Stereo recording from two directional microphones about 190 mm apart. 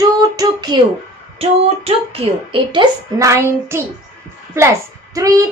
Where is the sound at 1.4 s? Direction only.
30° right (ahead or behind); by 3.8 s 15° right (ahead or behind).